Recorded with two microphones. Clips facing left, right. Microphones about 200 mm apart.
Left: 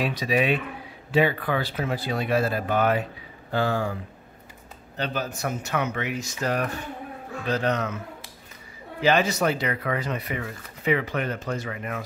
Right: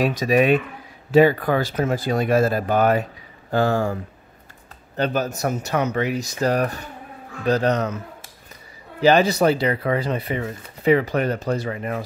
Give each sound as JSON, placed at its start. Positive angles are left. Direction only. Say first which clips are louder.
{"t": 0.0, "sound": "speech", "louder": "right 6 dB", "side_deg": -45}